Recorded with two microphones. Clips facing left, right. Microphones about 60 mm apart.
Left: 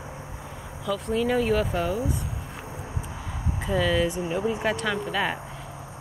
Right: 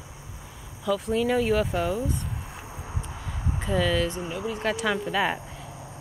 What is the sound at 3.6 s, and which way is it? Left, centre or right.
Speech, centre.